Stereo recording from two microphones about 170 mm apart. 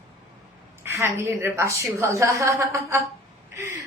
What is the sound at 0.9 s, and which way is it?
A woman's voice, 15° right (ahead or behind).